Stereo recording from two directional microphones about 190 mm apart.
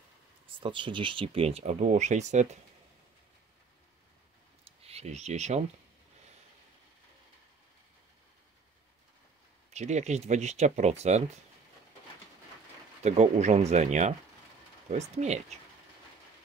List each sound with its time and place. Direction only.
0.6 s speech: 25° right (ahead or behind)
4.6 s speech: 35° right (ahead or behind)
9.7 s speech: 35° right (ahead or behind)
13.0 s speech: 35° right (ahead or behind)